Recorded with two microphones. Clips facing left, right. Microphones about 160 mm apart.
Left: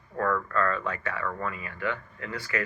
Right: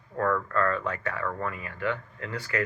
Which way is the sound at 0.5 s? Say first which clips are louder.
Right 1 dB; 35° right (ahead or behind).